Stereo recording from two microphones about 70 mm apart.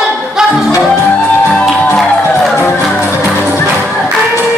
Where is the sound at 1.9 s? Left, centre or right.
Centre.